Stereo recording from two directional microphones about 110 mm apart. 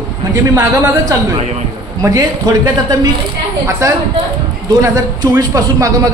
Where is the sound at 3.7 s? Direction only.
25° right (ahead or behind).